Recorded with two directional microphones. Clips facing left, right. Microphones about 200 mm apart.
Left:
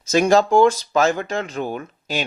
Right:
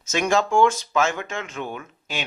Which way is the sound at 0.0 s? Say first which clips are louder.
Left 6 dB; 35° left (ahead or behind).